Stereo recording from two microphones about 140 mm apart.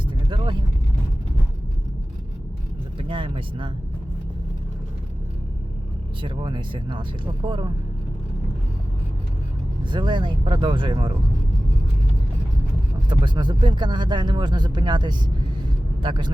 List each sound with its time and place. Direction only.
0.0 s vehicle: 35° right (ahead or behind)
3.0 s vehicle: 40° right (ahead or behind)
6.2 s speech: 35° right (ahead or behind)
9.8 s speech: 35° right (ahead or behind)
13.1 s speech: 35° right (ahead or behind)